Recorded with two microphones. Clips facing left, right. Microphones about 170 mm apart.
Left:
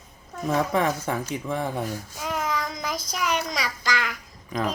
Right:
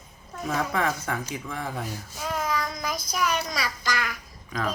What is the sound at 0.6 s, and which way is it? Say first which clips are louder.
Speech: left 3 dB; 20° left (ahead or behind).